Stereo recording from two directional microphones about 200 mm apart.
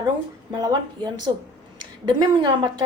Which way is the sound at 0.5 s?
20° right (ahead or behind).